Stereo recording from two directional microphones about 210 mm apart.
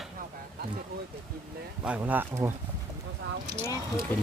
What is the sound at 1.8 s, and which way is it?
Speech, 5° right (ahead or behind).